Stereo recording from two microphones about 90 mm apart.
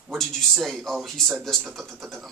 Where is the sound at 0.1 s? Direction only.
Centre (ahead or behind).